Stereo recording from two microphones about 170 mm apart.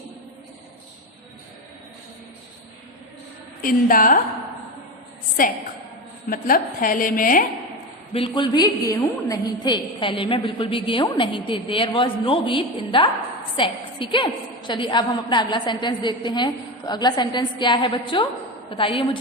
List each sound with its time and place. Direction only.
3.6 s a woman's voice: 55° left (ahead or behind)
5.4 s a woman's voice: 55° left (ahead or behind)
8.1 s a woman's voice: 30° left (ahead or behind)